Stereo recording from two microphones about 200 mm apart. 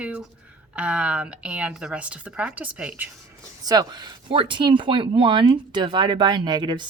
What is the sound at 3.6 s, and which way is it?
Speech, 20° right (ahead or behind).